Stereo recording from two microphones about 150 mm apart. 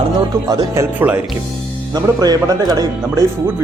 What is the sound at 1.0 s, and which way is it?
Speech, 10° right (ahead or behind).